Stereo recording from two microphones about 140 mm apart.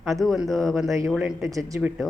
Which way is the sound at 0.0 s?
Centre (ahead or behind).